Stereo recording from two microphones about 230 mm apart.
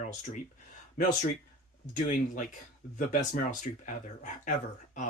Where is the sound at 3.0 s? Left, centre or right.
Left.